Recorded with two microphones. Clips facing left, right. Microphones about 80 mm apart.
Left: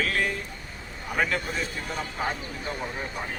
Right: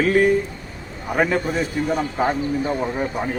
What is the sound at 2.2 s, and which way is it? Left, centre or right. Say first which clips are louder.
Speech: right 10 dB; right.